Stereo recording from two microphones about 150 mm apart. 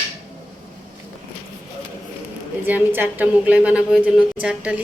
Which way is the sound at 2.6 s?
10° right (ahead or behind).